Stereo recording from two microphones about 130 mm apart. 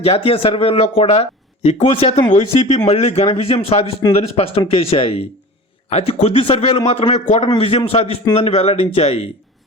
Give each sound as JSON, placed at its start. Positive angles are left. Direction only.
{"t": 0.0, "sound": "speech", "side_deg": 50}
{"t": 2.3, "sound": "speech", "side_deg": 60}
{"t": 7.5, "sound": "speech", "side_deg": 45}